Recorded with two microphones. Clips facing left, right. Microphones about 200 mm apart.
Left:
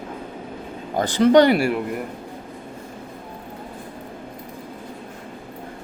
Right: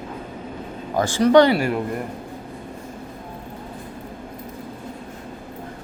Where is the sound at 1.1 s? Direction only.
20° left (ahead or behind).